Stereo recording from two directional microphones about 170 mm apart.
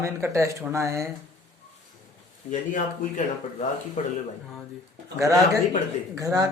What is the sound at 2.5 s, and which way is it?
Speech, 50° left (ahead or behind).